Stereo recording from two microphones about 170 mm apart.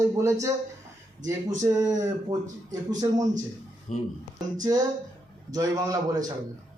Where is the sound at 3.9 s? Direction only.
45° left (ahead or behind).